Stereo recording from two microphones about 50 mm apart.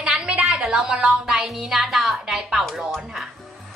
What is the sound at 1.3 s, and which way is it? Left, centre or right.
A woman's voice, centre.